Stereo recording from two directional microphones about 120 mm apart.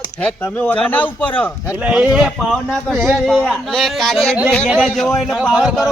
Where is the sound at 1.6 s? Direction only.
10° right (ahead or behind).